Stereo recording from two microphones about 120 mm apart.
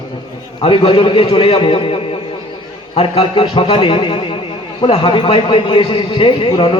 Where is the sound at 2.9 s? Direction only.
50° left (ahead or behind).